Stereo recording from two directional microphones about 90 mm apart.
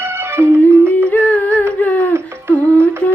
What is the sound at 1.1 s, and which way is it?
Music, 15° left (ahead or behind).